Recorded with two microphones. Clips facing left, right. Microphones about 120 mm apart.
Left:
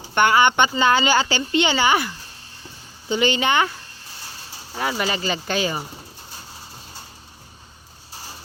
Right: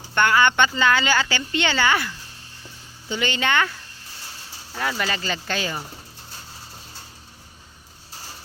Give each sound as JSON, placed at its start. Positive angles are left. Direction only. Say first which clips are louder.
{"t": 0.1, "sound": "speech", "louder": "left 2 dB", "side_deg": 20}
{"t": 4.7, "sound": "speech", "louder": "left 2 dB", "side_deg": 15}